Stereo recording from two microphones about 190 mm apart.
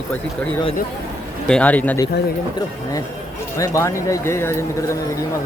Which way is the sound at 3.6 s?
15° left (ahead or behind).